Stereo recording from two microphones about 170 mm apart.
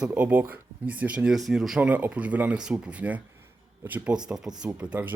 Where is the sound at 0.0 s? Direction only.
10° right (ahead or behind).